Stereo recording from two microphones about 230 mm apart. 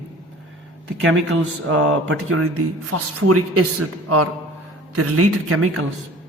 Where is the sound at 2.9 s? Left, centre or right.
Right.